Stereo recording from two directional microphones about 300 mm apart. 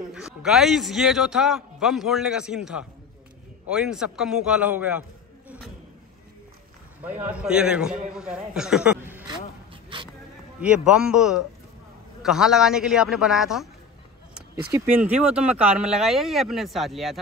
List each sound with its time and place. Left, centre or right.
0.1 s speech: centre
7.0 s a man's voice: centre
9.9 s a sound: centre
10.6 s speech: centre